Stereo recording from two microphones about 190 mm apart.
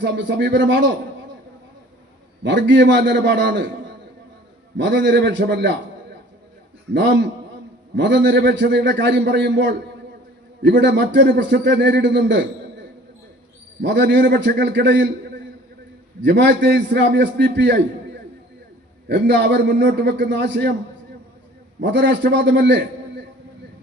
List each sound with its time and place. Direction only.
0.0 s a man's voice: 70° right (ahead or behind)
2.4 s a man's voice: 70° right (ahead or behind)
4.8 s a man's voice: 65° right (ahead or behind)
6.9 s a man's voice: 65° right (ahead or behind)
13.8 s a man's voice: 65° right (ahead or behind)
16.2 s a man's voice: 70° right (ahead or behind)
19.0 s a man's voice: 65° right (ahead or behind)
21.8 s a man's voice: 70° right (ahead or behind)